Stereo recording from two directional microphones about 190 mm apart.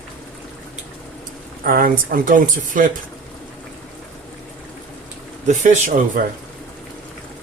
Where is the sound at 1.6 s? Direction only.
50° right (ahead or behind).